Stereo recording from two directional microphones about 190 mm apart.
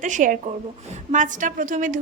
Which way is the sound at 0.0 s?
40° right (ahead or behind).